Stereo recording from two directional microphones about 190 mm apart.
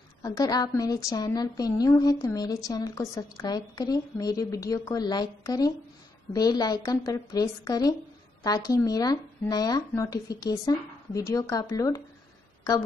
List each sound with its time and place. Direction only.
0.2 s a woman's voice: 20° left (ahead or behind)